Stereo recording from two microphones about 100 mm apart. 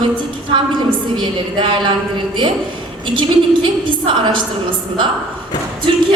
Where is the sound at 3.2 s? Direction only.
55° right (ahead or behind).